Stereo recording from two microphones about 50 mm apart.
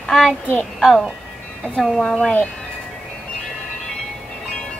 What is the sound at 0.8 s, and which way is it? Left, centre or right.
Speech, centre.